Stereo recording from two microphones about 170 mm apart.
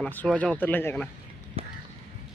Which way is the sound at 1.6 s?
35° right (ahead or behind).